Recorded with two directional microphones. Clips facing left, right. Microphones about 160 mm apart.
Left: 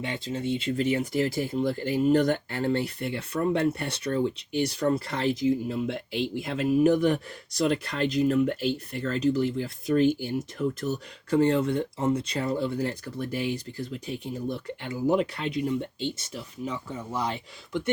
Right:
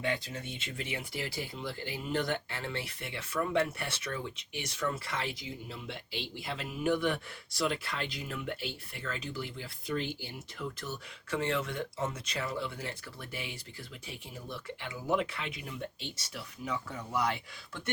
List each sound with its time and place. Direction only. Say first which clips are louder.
0.0 s speech: left 5 dB; 25° left (ahead or behind)